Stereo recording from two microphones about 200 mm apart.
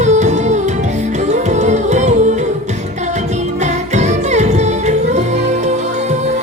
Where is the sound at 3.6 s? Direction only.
35° right (ahead or behind).